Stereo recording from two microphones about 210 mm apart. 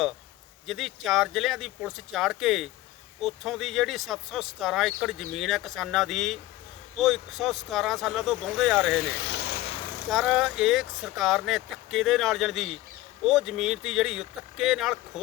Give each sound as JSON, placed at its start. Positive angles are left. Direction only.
{"t": 0.7, "sound": "speech", "side_deg": 0}
{"t": 9.0, "sound": "speech", "side_deg": 50}
{"t": 10.1, "sound": "speech", "side_deg": 0}